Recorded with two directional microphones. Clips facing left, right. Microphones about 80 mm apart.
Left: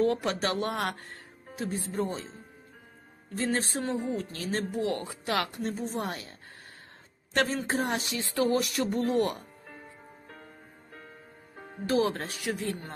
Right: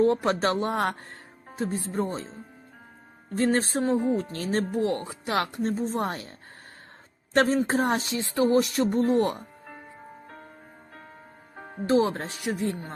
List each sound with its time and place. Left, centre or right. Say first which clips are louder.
0.0 s speech: right 5 dB; right
3.2 s speech: right 6 dB; right
7.3 s speech: right 6 dB; right
11.9 s speech: right 4 dB; right